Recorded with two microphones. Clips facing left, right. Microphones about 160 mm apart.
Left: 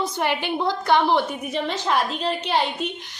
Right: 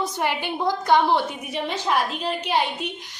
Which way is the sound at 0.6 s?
15° right (ahead or behind).